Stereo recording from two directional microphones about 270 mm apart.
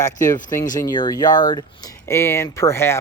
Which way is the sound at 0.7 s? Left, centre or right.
Centre.